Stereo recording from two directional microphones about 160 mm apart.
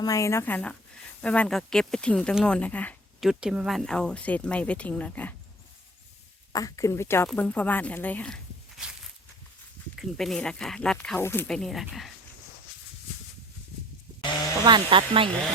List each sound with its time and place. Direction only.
0.0 s speech: 20° left (ahead or behind)
3.2 s speech: 5° right (ahead or behind)
6.5 s speech: 20° left (ahead or behind)
10.2 s speech: 5° left (ahead or behind)
11.2 s speech: 15° left (ahead or behind)
11.4 s speech: 5° left (ahead or behind)
14.6 s speech: 30° right (ahead or behind)